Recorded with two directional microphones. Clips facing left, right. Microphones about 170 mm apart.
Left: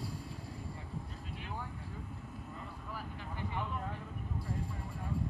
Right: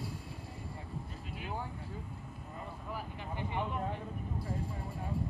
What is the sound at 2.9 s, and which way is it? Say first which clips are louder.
Vehicle: right 3 dB; 20° right (ahead or behind).